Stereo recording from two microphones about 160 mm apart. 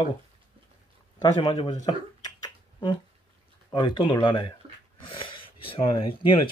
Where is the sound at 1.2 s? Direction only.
30° left (ahead or behind).